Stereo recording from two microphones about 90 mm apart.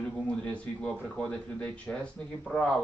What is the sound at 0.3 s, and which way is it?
Speech, 10° left (ahead or behind).